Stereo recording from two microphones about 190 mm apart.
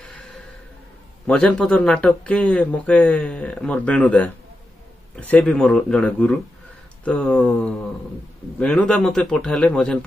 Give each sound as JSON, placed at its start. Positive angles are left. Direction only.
{"t": 1.2, "sound": "a man's voice", "side_deg": 5}